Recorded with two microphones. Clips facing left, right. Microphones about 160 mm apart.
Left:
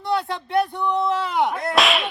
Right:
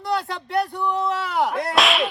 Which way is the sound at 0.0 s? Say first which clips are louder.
Left 1 dB; centre (ahead or behind).